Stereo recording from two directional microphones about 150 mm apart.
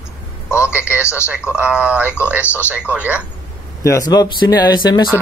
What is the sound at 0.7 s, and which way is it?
Speech, 10° right (ahead or behind).